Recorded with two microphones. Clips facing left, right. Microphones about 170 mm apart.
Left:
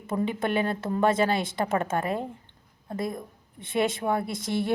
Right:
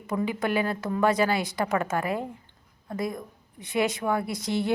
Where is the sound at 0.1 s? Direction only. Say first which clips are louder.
Even; 25° left (ahead or behind).